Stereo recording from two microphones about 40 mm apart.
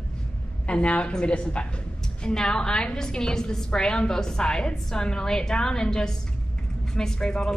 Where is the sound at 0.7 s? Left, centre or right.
Left.